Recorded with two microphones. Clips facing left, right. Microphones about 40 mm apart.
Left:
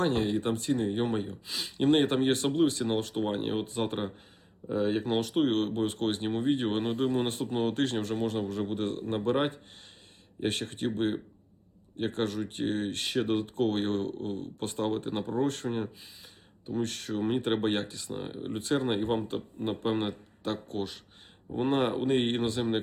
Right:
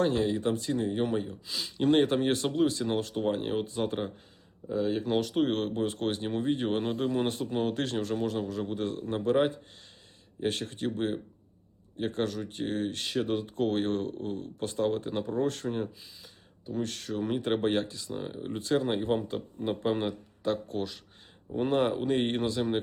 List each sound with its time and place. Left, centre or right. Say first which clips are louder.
0.0 s speech: right 1 dB; left
18.2 s speech: even; centre
18.5 s speech: right 1 dB; left